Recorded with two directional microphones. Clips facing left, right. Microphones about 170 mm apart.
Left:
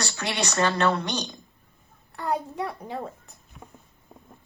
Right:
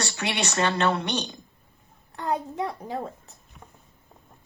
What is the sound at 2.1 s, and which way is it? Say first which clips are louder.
Speech: even; 30° right (ahead or behind).